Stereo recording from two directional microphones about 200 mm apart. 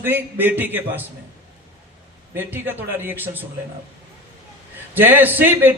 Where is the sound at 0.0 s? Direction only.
10° right (ahead or behind).